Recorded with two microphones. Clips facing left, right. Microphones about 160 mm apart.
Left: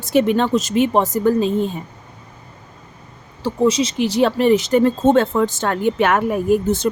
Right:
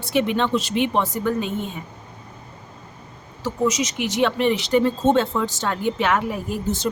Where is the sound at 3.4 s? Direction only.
30° left (ahead or behind); by 6.9 s 55° left (ahead or behind).